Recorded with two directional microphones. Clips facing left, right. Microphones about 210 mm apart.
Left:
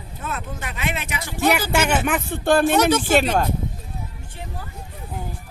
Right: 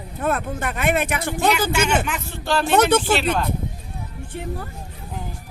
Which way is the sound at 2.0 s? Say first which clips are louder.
Left 6 dB; 55° left (ahead or behind).